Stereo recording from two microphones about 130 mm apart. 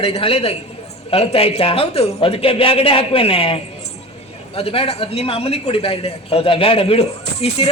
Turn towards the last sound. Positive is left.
turn(degrees=50)  # may be behind; listen again after turning